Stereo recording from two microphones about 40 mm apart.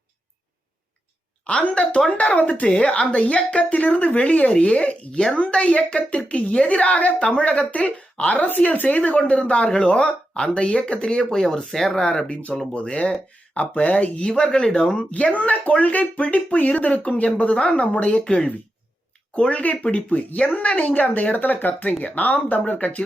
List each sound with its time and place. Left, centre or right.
1.5 s a woman's voice: left
8.4 s a woman's voice: left
11.3 s speech: centre
11.9 s a woman's voice: left
14.2 s a woman's voice: left
16.6 s a woman's voice: left
21.3 s speech: left